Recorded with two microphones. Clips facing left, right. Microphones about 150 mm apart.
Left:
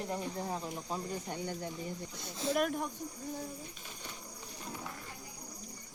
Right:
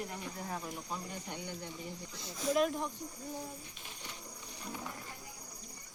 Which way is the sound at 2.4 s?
30° left (ahead or behind).